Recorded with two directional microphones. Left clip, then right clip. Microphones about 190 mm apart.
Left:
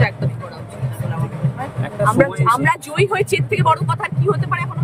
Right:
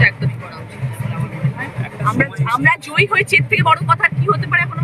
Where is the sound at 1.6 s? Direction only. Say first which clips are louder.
Left 3 dB; 10° left (ahead or behind).